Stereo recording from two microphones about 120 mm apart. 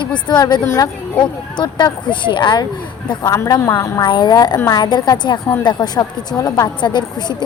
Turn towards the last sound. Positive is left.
turn(degrees=40)  # may be behind; listen again after turning